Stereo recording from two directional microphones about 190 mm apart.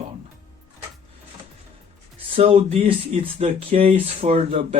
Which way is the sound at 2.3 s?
30° right (ahead or behind).